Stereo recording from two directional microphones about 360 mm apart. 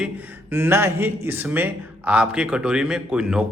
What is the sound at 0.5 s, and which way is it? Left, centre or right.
Speech, centre.